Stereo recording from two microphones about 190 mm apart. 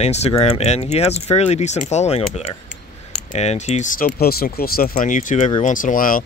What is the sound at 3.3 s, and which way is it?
Speech, 35° left (ahead or behind).